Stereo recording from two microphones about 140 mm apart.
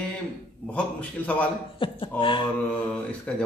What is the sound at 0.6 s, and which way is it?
Speech, 10° left (ahead or behind).